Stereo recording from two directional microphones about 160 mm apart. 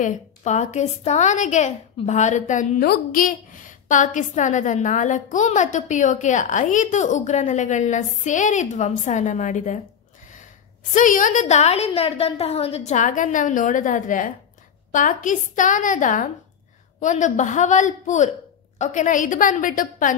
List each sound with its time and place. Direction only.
0.0 s a woman's voice: 50° left (ahead or behind)